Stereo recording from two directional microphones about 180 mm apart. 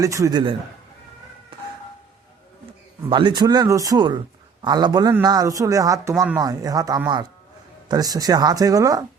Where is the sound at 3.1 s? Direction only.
25° right (ahead or behind).